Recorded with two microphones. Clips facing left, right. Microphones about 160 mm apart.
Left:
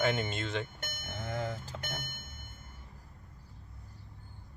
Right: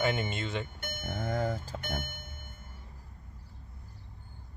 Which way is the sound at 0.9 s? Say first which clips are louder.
Right 5 dB; 55° right (ahead or behind).